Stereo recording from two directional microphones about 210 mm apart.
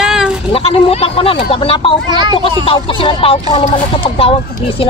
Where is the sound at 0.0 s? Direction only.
5° right (ahead or behind).